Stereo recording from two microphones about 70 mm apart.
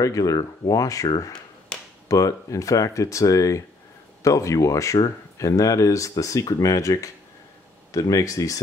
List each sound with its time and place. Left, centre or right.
0.0 s speech: left
1.7 s a sound: centre
2.0 s speech: left